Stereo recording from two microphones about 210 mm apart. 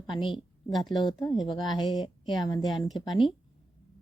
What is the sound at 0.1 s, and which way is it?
A woman's voice, 25° left (ahead or behind).